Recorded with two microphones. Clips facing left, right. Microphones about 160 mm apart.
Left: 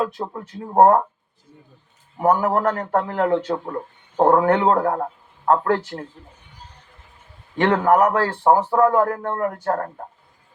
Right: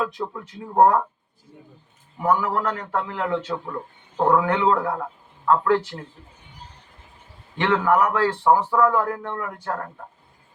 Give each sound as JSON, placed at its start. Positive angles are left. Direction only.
{"t": 0.0, "sound": "speech", "side_deg": 40}
{"t": 2.1, "sound": "speech", "side_deg": 45}
{"t": 7.6, "sound": "speech", "side_deg": 45}